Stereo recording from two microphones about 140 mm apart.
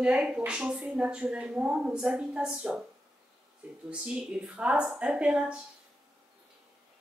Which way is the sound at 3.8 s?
10° right (ahead or behind).